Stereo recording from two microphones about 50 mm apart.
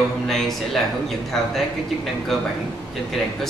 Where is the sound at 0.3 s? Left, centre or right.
Centre.